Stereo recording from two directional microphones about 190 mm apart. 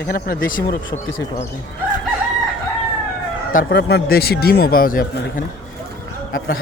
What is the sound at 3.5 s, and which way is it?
A man's voice, 55° left (ahead or behind).